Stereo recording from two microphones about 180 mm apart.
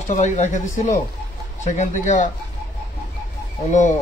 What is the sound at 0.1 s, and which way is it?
Speech, 40° left (ahead or behind).